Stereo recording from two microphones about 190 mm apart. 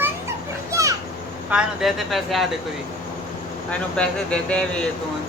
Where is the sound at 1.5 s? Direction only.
5° right (ahead or behind).